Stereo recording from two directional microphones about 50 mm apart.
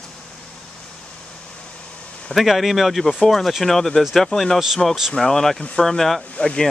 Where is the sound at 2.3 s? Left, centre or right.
Centre.